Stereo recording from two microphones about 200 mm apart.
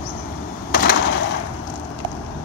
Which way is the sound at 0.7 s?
50° left (ahead or behind).